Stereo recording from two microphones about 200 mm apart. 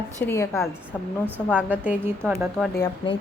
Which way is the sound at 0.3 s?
15° left (ahead or behind).